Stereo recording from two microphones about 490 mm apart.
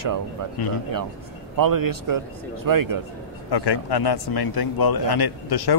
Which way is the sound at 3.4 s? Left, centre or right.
Left.